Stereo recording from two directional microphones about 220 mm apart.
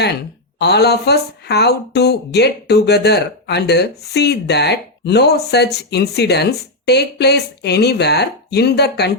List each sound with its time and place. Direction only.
0.6 s speech: 50° left (ahead or behind)